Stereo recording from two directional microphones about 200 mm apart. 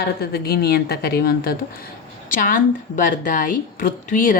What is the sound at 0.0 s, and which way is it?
A woman's voice, 50° left (ahead or behind).